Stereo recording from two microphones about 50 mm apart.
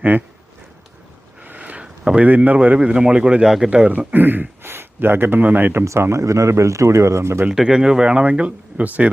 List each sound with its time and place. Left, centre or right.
0.1 s speech: right
1.4 s a sound: right
2.2 s speech: right
2.7 s speech: right
3.4 s speech: centre
3.7 s speech: right
4.1 s speech: right
5.8 s speech: right
7.5 s speech: centre; by 9.0 s right